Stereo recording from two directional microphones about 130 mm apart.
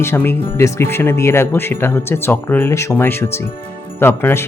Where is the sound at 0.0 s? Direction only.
20° left (ahead or behind).